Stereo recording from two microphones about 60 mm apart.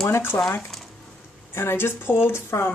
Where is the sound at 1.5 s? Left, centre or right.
Left.